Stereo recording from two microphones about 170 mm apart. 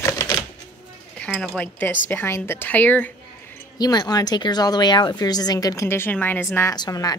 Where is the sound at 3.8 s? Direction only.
25° left (ahead or behind).